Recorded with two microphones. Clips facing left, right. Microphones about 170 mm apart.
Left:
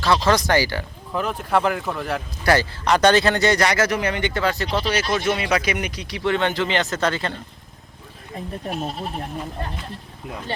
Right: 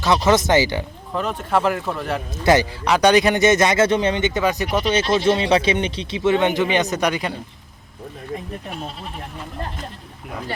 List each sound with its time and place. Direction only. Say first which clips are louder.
0.3 s speech: right 3 dB; 20° right (ahead or behind)
1.1 s speech: even; centre (ahead or behind)
2.4 s speech: right 3 dB; 20° right (ahead or behind)
8.7 s speech: left 8 dB; 35° left (ahead or behind)